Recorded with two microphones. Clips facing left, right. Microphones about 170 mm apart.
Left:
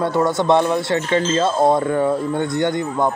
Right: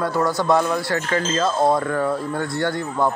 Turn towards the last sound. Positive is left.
turn(degrees=20)  # may be behind; listen again after turning